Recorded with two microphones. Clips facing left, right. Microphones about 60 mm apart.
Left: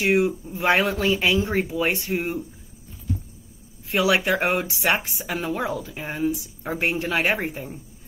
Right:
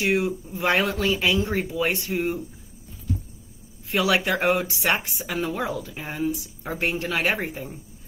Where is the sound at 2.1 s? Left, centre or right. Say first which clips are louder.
Even; centre.